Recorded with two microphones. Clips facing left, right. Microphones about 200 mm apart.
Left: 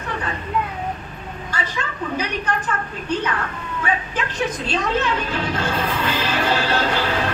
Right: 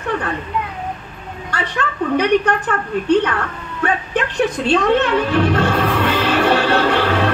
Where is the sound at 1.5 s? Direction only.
65° right (ahead or behind).